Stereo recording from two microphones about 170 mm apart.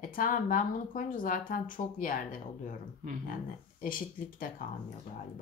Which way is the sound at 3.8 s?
55° left (ahead or behind).